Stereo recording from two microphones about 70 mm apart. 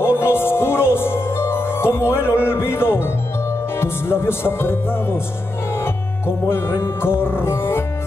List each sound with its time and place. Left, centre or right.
0.0 s music: left